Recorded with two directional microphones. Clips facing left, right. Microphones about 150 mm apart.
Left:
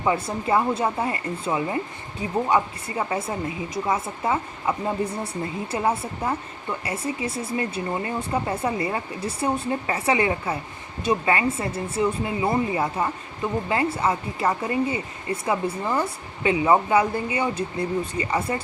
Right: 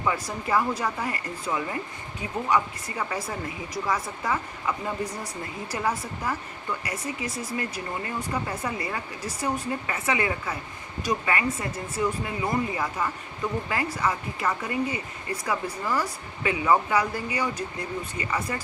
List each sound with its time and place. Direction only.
0.0 s speech: 25° left (ahead or behind)